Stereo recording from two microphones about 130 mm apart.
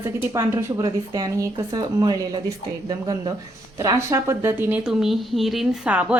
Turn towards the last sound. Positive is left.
turn(degrees=-10)  # may be behind; listen again after turning